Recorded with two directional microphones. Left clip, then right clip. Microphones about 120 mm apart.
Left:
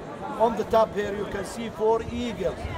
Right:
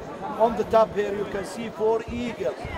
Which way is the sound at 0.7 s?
25° left (ahead or behind).